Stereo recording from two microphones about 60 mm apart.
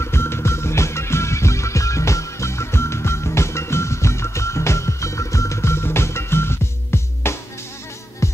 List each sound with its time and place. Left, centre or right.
0.0 s music: left
8.2 s insect: left